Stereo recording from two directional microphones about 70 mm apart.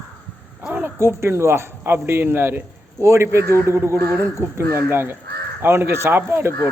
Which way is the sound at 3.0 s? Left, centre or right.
Right.